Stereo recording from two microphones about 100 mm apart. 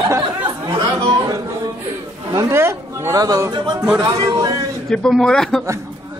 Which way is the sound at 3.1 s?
40° right (ahead or behind).